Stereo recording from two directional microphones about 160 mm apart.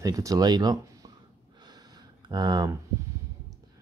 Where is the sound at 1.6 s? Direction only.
25° right (ahead or behind).